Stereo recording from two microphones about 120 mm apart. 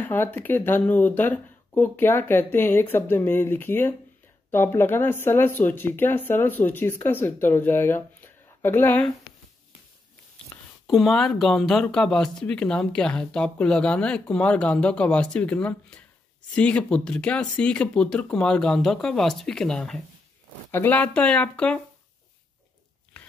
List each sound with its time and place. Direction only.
0.0 s speech: 15° left (ahead or behind)
10.9 s speech: centre (ahead or behind)